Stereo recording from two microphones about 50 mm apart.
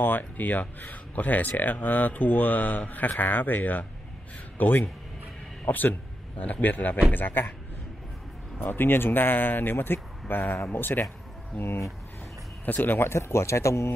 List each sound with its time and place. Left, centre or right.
0.0 s a man's voice: left
8.5 s speech: left
11.6 s speech: left
12.6 s speech: left
13.1 s speech: left